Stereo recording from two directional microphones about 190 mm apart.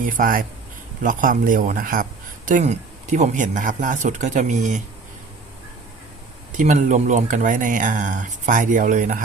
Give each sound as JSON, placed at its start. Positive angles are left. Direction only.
{"t": 0.0, "sound": "speech", "side_deg": -45}
{"t": 6.6, "sound": "speech", "side_deg": -40}